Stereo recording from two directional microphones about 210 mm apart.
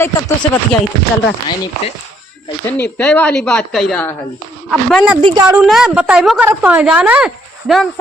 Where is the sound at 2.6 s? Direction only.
5° left (ahead or behind).